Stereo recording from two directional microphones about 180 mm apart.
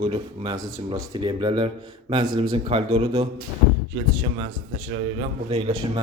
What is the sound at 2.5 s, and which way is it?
Speech, 35° right (ahead or behind).